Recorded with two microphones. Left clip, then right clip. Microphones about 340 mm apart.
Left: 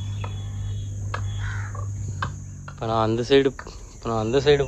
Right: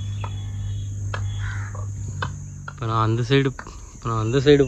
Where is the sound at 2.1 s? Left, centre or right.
Centre.